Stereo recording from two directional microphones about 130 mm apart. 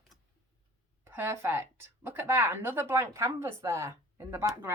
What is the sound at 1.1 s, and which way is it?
Speech, 20° right (ahead or behind).